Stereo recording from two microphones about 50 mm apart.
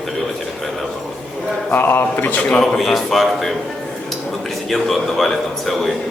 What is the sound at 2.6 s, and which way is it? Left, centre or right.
Speech, centre.